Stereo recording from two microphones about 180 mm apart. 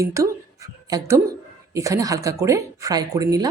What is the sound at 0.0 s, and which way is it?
A woman's voice, 15° right (ahead or behind).